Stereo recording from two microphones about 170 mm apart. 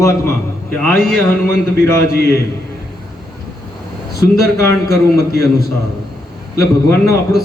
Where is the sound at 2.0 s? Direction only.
65° left (ahead or behind).